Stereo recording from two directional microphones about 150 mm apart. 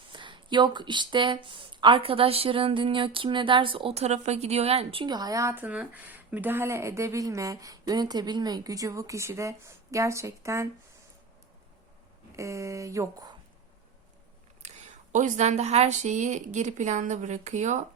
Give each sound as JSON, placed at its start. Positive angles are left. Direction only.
{"t": 0.1, "sound": "speech", "side_deg": -35}
{"t": 12.4, "sound": "speech", "side_deg": -20}
{"t": 14.6, "sound": "a sound", "side_deg": -45}
{"t": 15.1, "sound": "speech", "side_deg": -55}